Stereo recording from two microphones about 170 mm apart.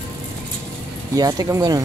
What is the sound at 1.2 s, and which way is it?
Speech, 20° right (ahead or behind).